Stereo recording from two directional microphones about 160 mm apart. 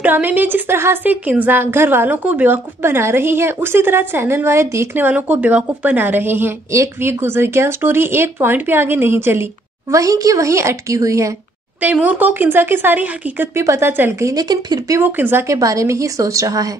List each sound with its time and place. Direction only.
0.0 s a woman's voice: 10° right (ahead or behind)
11.8 s a woman's voice: 10° right (ahead or behind)
14.3 s speech: 25° right (ahead or behind)